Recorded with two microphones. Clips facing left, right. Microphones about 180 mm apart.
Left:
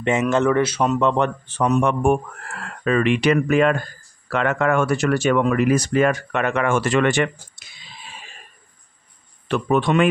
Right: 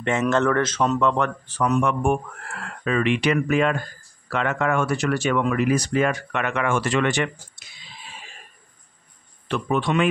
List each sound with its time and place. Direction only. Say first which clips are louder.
0.0 s speech: left 2 dB; 15° left (ahead or behind)
2.0 s speech: left 4 dB; 45° left (ahead or behind)
9.5 s speech: left 4 dB; 50° left (ahead or behind)